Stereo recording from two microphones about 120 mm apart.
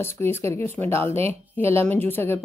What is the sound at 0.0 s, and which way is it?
A woman's voice, 20° left (ahead or behind).